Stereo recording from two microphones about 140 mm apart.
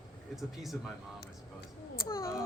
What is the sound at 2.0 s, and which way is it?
Speech, 20° left (ahead or behind).